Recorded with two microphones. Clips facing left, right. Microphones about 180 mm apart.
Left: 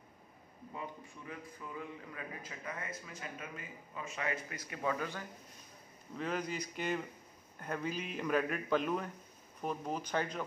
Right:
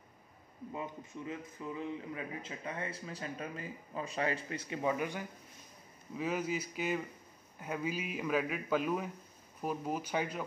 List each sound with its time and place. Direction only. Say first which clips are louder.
0.7 s a man's voice: right 3 dB; 20° right (ahead or behind)